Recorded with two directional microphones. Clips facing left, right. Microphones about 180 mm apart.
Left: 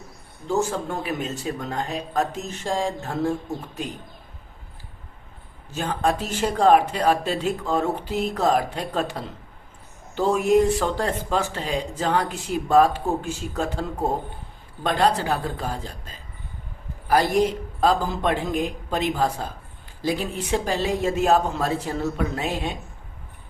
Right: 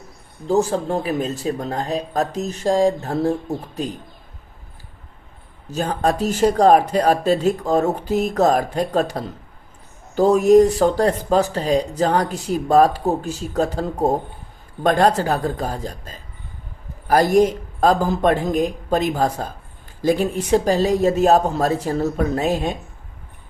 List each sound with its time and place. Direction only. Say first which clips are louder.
0.4 s speech: right 5 dB; 35° right (ahead or behind)
5.7 s a man's voice: right 3 dB; 40° right (ahead or behind)